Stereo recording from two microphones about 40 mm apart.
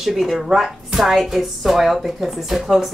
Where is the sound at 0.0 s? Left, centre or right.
Centre.